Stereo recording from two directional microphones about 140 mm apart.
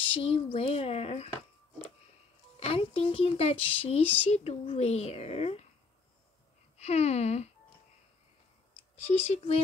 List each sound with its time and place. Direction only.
0.0 s speech: 40° left (ahead or behind)
4.0 s speech: 10° left (ahead or behind)
4.3 s speech: 50° left (ahead or behind)
6.8 s speech: 50° left (ahead or behind)
9.0 s speech: 50° left (ahead or behind)